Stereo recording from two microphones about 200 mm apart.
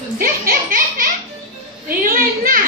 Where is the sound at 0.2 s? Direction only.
45° right (ahead or behind).